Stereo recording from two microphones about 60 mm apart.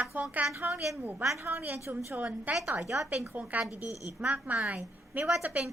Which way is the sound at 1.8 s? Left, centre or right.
Right.